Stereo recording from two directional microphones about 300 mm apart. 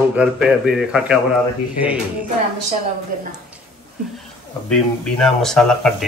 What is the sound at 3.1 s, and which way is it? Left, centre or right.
Speech, right.